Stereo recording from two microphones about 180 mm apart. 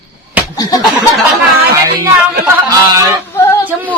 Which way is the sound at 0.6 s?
20° left (ahead or behind).